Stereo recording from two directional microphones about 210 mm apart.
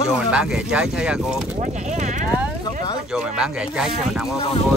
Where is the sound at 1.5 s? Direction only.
35° right (ahead or behind).